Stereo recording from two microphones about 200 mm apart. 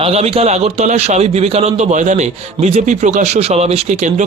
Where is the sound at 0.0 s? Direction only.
30° right (ahead or behind).